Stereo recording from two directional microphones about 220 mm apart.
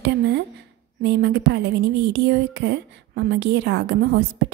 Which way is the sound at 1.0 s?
50° right (ahead or behind).